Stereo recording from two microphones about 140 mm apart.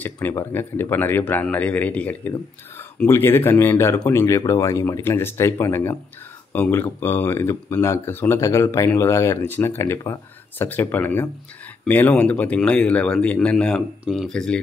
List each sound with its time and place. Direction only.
0.0 s speech: 15° left (ahead or behind)